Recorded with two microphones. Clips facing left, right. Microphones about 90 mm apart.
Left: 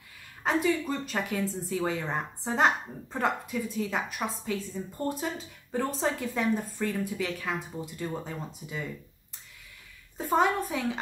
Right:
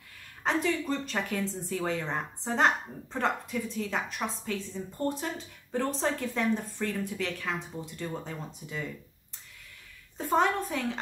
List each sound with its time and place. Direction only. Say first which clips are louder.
0.4 s a woman's voice: left 2 dB; 5° left (ahead or behind)
10.1 s a woman's voice: left 1 dB; 5° left (ahead or behind)